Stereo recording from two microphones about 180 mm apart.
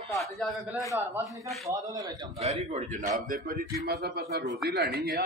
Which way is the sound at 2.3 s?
35° right (ahead or behind).